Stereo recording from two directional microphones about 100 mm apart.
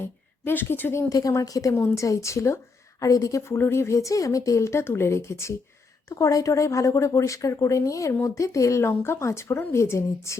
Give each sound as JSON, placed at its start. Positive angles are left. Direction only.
{"t": 0.0, "sound": "speech", "side_deg": 20}
{"t": 1.1, "sound": "a woman's voice", "side_deg": 35}